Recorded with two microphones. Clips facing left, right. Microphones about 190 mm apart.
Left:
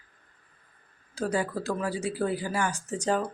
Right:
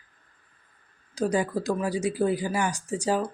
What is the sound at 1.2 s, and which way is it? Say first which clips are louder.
Speech: right 3 dB; 15° right (ahead or behind).